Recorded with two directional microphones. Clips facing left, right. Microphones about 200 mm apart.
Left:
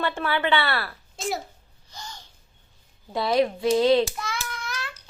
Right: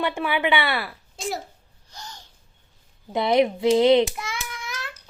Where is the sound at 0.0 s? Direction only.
15° right (ahead or behind).